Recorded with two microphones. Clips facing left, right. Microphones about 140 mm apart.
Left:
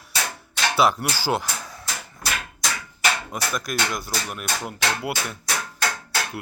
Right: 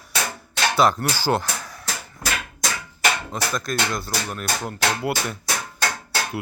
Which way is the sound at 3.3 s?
10° left (ahead or behind).